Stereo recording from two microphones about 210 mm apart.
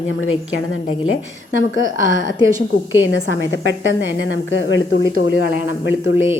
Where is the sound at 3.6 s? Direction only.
60° right (ahead or behind).